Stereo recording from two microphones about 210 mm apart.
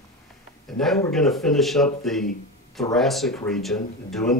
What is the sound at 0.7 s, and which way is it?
Speech, centre (ahead or behind).